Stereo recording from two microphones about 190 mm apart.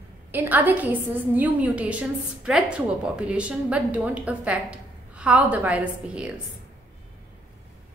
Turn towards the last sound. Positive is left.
turn(degrees=-5)  # may be behind; listen again after turning